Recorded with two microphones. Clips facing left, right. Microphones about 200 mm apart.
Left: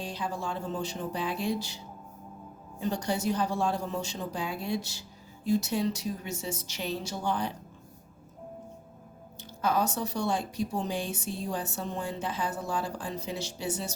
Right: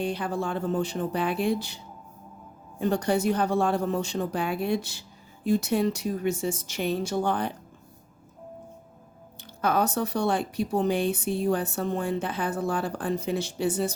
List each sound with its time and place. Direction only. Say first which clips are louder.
0.0 s a woman's voice: right 6 dB; 60° right (ahead or behind)
9.4 s speech: right 3 dB; 60° right (ahead or behind)